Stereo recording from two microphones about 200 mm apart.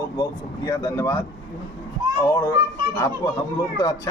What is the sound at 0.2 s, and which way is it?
Speech, 15° left (ahead or behind).